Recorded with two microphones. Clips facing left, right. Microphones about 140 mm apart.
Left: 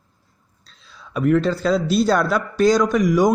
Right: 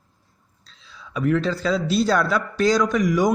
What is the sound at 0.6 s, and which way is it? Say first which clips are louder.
Speech: even; 50° left (ahead or behind).